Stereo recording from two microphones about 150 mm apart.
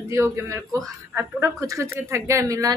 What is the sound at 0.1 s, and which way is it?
Speech, 20° right (ahead or behind).